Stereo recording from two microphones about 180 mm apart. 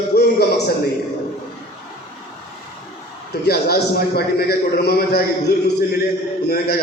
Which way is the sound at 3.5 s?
60° left (ahead or behind).